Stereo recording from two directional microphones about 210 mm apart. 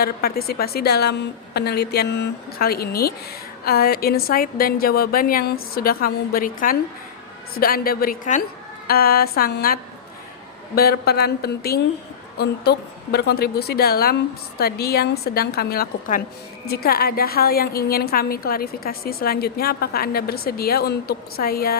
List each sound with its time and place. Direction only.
0.0 s a woman's voice: 45° left (ahead or behind)